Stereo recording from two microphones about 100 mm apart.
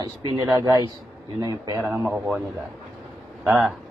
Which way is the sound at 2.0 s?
15° right (ahead or behind).